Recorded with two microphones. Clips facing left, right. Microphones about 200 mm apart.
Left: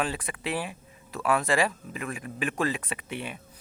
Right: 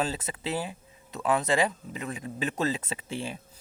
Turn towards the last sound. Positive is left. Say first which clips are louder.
# right 1 dB
turn(degrees=-25)  # may be behind; listen again after turning